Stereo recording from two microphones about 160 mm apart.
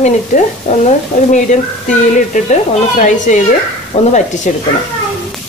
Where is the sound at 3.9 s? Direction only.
40° left (ahead or behind).